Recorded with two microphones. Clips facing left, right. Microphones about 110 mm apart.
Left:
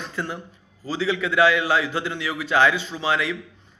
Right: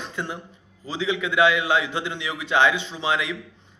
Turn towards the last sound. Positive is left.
turn(degrees=-20)  # may be behind; listen again after turning